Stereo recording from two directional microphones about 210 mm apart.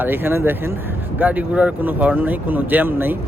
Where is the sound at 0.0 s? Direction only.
10° right (ahead or behind).